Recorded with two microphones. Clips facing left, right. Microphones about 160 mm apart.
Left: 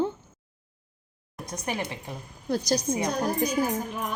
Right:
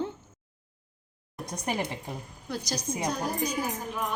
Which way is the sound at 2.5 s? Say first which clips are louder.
Left 8 dB; 40° left (ahead or behind).